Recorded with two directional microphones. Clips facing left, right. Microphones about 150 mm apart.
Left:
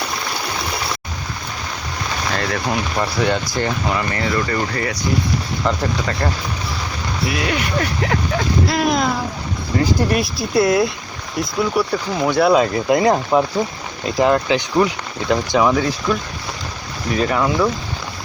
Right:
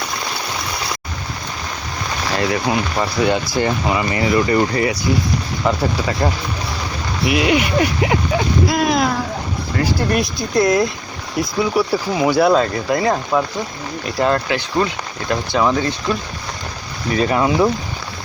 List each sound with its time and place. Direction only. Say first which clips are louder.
2.3 s speech: right 4 dB; 10° right (ahead or behind)
8.6 s speech: even; centre (ahead or behind)
9.7 s speech: left 2 dB; 20° left (ahead or behind)
10.1 s speech: even; centre (ahead or behind)
12.9 s speech: left 3 dB; 20° left (ahead or behind)
15.7 s speech: left 1 dB; centre (ahead or behind)
17.2 s speech: right 2 dB; 5° right (ahead or behind)